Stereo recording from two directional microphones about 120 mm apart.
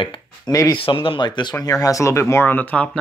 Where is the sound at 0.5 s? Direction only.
30° left (ahead or behind).